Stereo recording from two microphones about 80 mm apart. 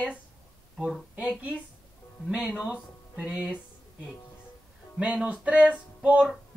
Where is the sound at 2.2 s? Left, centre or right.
Centre.